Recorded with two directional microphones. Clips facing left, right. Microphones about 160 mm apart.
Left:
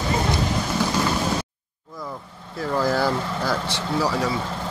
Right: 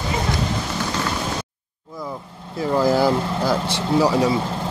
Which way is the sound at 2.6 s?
15° right (ahead or behind).